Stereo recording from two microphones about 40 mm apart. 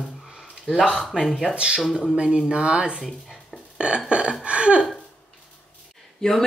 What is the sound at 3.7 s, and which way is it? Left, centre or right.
Burping, right.